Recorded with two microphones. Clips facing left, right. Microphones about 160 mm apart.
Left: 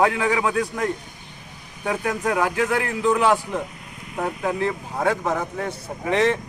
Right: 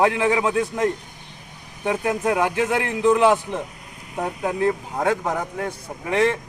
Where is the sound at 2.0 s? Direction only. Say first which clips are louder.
Right 1 dB; 20° right (ahead or behind).